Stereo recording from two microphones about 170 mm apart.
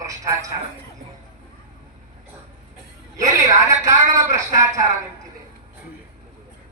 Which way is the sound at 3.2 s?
20° right (ahead or behind).